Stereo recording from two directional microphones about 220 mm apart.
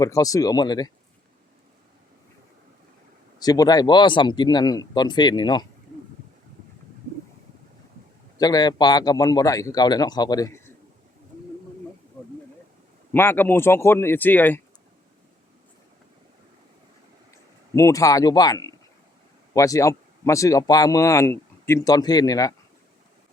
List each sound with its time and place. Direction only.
0.0 s speech: 15° left (ahead or behind)
3.3 s a man's voice: 15° left (ahead or behind)
8.4 s speech: 15° left (ahead or behind)
13.1 s speech: 10° left (ahead or behind)
17.7 s speech: 15° left (ahead or behind)